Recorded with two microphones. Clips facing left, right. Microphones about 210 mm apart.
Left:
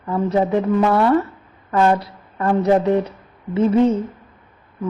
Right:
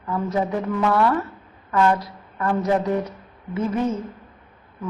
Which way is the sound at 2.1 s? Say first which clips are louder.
Left 4 dB; 30° left (ahead or behind).